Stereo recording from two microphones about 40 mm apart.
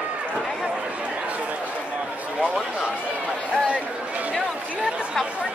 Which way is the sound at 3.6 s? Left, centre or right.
Right.